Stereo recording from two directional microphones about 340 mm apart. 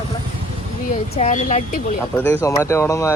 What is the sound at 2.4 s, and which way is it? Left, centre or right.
Speech, centre.